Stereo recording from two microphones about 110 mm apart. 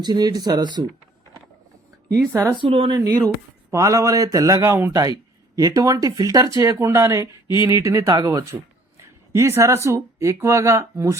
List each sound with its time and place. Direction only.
0.0 s speech: 40° right (ahead or behind)
2.3 s speech: 25° right (ahead or behind)
2.6 s speech: 55° right (ahead or behind)
3.1 s speech: 15° left (ahead or behind)
3.7 s speech: 30° right (ahead or behind)